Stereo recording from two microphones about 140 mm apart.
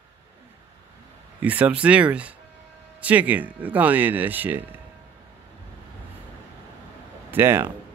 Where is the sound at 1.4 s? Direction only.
10° right (ahead or behind).